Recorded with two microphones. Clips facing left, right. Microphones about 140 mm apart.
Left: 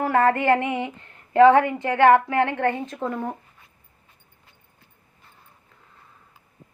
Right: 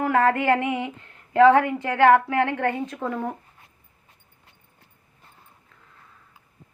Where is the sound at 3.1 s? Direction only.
5° left (ahead or behind).